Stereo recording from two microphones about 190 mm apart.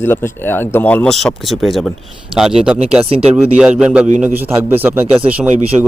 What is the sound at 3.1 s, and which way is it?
Speech, 30° right (ahead or behind).